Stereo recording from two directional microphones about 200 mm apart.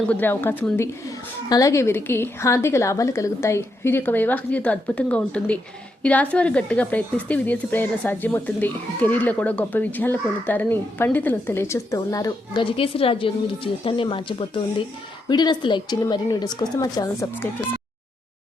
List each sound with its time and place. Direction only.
0.0 s a woman's voice: 10° left (ahead or behind)